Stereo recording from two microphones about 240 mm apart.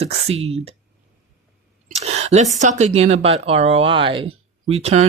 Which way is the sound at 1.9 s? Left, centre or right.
Right.